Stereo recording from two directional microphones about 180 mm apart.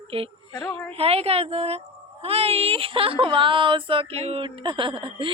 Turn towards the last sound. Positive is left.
turn(degrees=-30)  # may be behind; listen again after turning